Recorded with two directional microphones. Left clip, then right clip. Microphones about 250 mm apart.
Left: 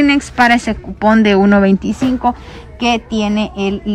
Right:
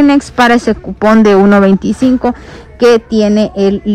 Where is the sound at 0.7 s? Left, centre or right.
Left.